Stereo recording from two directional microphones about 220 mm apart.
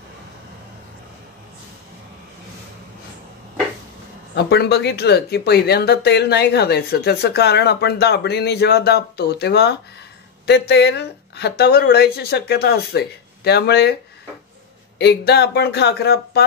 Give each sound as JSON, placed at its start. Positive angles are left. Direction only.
{"t": 4.4, "sound": "speech", "side_deg": 50}
{"t": 15.0, "sound": "speech", "side_deg": 50}